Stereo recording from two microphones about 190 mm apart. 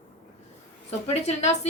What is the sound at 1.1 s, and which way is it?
Speech, 35° left (ahead or behind).